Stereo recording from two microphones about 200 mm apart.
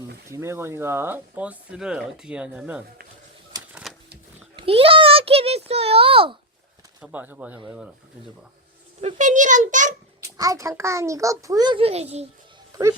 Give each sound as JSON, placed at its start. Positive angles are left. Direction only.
{"t": 0.3, "sound": "speech", "side_deg": -15}
{"t": 3.7, "sound": "a sound", "side_deg": -5}
{"t": 4.5, "sound": "a child's voice", "side_deg": -30}
{"t": 7.0, "sound": "speech", "side_deg": -10}
{"t": 9.0, "sound": "a child's voice", "side_deg": -35}
{"t": 10.3, "sound": "speech", "side_deg": -15}
{"t": 12.7, "sound": "speech", "side_deg": -15}